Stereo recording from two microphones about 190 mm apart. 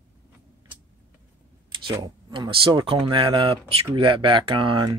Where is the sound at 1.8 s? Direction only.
25° right (ahead or behind).